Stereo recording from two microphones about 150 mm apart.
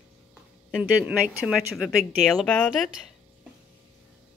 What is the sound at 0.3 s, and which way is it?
Speech, 5° right (ahead or behind).